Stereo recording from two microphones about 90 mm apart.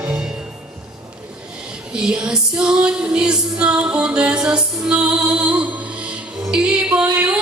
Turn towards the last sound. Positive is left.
turn(degrees=-15)  # may be behind; listen again after turning